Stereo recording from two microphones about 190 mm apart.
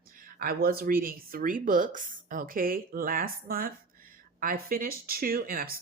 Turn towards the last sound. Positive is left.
turn(degrees=-50)  # may be behind; listen again after turning